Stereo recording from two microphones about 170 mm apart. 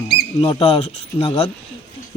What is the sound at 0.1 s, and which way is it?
Speech, 30° left (ahead or behind).